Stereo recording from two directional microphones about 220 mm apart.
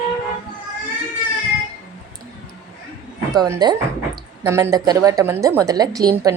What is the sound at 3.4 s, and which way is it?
A woman's voice, 20° right (ahead or behind).